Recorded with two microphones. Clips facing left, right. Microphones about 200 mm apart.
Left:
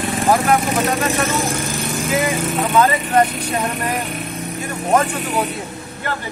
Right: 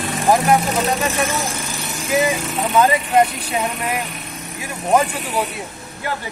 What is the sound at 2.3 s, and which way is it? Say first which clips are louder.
Speech: left 2 dB; 15° right (ahead or behind).